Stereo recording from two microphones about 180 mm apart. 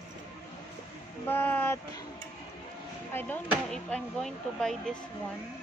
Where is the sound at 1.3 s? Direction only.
10° left (ahead or behind).